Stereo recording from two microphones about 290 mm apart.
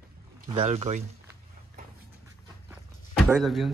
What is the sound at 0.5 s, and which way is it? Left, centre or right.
Speech, centre.